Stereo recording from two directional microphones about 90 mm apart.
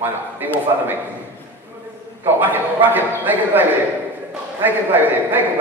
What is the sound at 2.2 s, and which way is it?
Speech, 20° right (ahead or behind).